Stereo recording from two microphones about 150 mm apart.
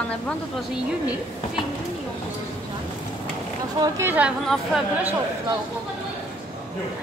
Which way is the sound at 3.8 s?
20° right (ahead or behind).